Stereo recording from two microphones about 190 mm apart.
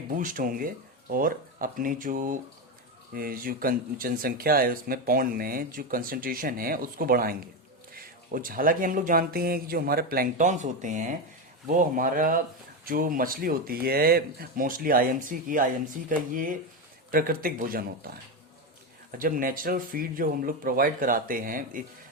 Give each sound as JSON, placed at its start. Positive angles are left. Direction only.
{"t": 0.2, "sound": "speech", "side_deg": -45}